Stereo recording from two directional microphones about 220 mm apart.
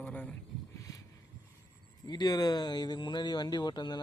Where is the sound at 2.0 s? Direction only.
20° left (ahead or behind).